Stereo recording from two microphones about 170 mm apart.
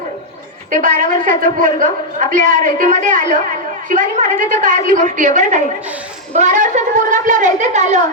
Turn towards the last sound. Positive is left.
turn(degrees=-45)  # may be behind; listen again after turning